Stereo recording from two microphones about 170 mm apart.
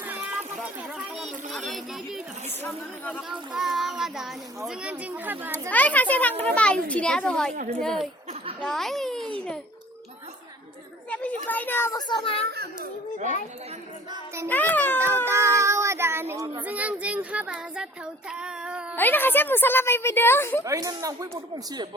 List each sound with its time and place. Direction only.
0.0 s a sound: 10° right (ahead or behind)
1.1 s a sound: centre (ahead or behind)
2.6 s a child's voice: 10° left (ahead or behind)
3.2 s a child's voice: centre (ahead or behind)
5.7 s a child's voice: 10° left (ahead or behind)
7.5 s speech: 55° right (ahead or behind)
7.8 s a child's voice: 5° left (ahead or behind)
11.1 s a sound: 10° left (ahead or behind)
11.9 s a child's voice: 25° left (ahead or behind)
14.4 s a child's voice: 10° left (ahead or behind)
15.2 s child singing: 15° right (ahead or behind)
18.9 s a child's voice: 10° left (ahead or behind)
20.7 s speech: 20° right (ahead or behind)